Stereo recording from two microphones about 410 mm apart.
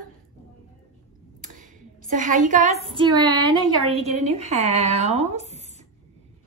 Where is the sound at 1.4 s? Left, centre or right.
Centre.